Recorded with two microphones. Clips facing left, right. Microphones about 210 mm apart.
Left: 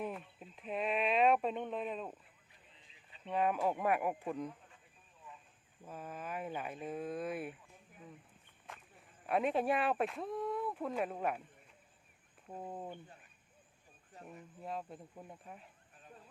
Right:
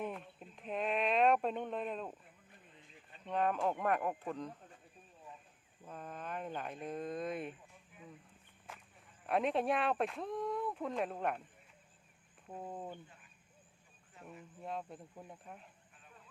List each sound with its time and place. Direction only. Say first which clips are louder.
0.0 s a sound: even; centre (ahead or behind)
2.5 s a sound: right 8 dB; 50° right (ahead or behind)
3.2 s speech: left 1 dB; 5° left (ahead or behind)
5.8 s speech: left 1 dB; 5° left (ahead or behind)
9.2 s speech: even; centre (ahead or behind)
12.5 s speech: even; centre (ahead or behind)
14.3 s speech: even; centre (ahead or behind)